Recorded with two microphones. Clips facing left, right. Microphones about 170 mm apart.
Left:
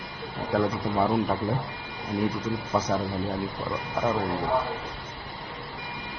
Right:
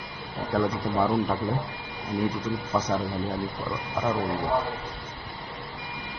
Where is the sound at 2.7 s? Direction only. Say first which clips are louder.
Even; 10° left (ahead or behind).